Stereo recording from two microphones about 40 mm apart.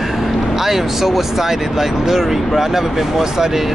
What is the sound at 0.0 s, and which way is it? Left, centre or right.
Speech, centre.